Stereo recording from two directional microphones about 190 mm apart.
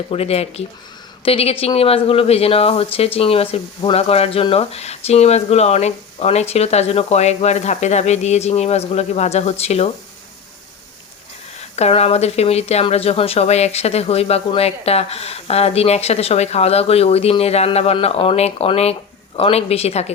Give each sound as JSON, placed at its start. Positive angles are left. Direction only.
{"t": 0.1, "sound": "speech", "side_deg": 30}
{"t": 11.8, "sound": "speech", "side_deg": 35}